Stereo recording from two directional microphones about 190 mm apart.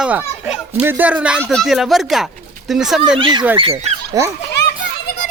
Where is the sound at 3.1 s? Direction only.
25° right (ahead or behind).